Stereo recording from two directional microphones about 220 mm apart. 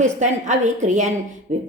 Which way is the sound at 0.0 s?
30° right (ahead or behind).